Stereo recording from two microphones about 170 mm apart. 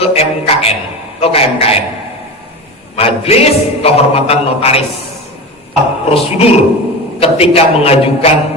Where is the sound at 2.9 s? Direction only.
35° left (ahead or behind).